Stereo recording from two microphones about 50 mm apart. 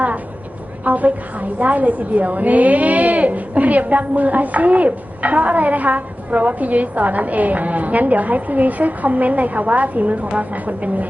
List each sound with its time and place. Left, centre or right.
0.9 s a woman's voice: right